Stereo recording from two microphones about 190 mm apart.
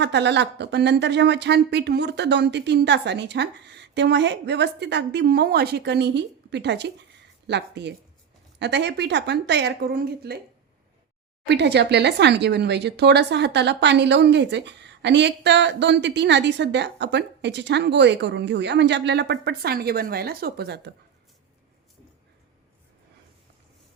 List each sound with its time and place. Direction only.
0.0 s speech: 65° right (ahead or behind)
11.4 s speech: 65° right (ahead or behind)